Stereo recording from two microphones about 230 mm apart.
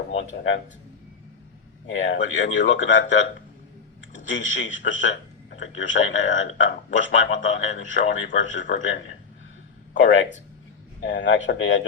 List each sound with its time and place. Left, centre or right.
1.9 s a man's voice: left